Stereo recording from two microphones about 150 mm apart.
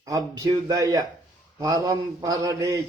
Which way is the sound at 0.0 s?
25° right (ahead or behind).